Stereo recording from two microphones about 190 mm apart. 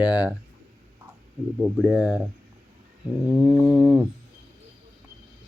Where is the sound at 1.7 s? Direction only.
5° right (ahead or behind).